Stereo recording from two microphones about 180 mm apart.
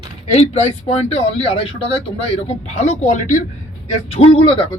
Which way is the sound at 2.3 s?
35° left (ahead or behind).